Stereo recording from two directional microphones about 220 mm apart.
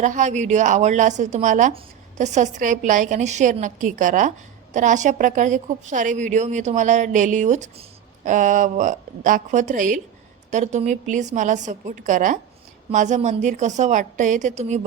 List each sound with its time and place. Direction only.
0.0 s a woman's voice: 35° right (ahead or behind)